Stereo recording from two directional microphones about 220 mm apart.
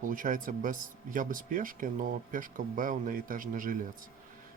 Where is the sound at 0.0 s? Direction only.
35° right (ahead or behind).